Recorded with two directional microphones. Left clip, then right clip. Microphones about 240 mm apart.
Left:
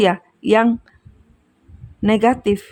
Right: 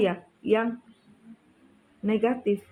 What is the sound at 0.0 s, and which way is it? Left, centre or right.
Speech, left.